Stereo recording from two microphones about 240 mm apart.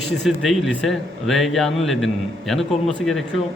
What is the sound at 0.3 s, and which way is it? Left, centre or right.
A man's voice, centre.